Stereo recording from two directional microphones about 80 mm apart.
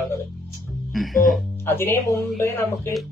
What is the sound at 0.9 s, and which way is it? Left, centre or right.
Speech, centre.